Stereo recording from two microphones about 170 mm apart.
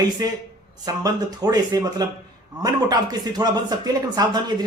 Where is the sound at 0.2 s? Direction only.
20° right (ahead or behind).